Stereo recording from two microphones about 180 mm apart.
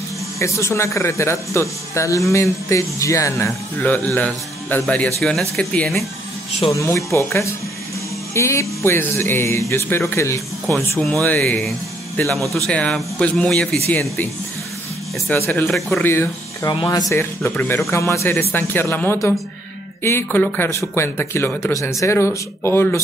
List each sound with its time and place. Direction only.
0.4 s speech: 15° left (ahead or behind)
6.7 s speech: 15° left (ahead or behind)
10.7 s speech: 5° left (ahead or behind)